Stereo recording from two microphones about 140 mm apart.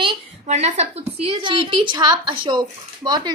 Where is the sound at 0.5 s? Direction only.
55° right (ahead or behind).